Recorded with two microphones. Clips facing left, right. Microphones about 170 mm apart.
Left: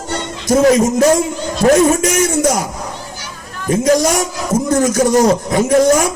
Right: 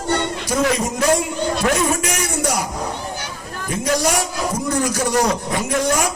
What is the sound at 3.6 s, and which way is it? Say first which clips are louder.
A man's voice: left 7 dB; 40° left (ahead or behind).